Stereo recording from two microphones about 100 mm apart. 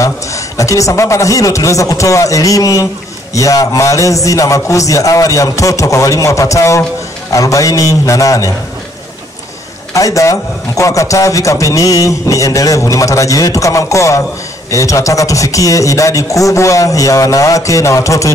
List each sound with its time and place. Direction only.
0.0 s a man's voice: 30° left (ahead or behind)
9.9 s a man's voice: 35° left (ahead or behind)